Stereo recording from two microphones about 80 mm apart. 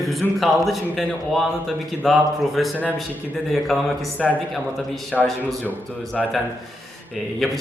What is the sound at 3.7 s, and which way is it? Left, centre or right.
Speech, centre.